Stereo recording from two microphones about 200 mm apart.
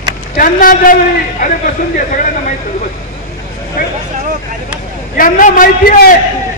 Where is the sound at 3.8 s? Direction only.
45° left (ahead or behind).